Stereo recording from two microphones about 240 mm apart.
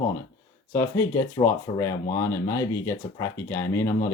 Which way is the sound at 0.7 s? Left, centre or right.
Centre.